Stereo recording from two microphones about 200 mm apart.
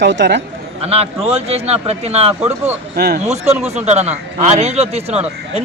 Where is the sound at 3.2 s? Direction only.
35° right (ahead or behind).